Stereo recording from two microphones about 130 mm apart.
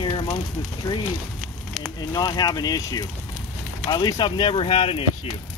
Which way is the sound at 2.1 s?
30° left (ahead or behind).